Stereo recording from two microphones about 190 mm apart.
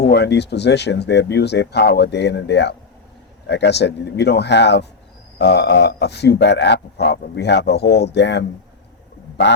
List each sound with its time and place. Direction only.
0.1 s speech: 60° left (ahead or behind)